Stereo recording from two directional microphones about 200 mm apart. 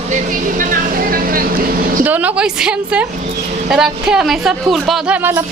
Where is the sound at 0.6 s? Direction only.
45° right (ahead or behind).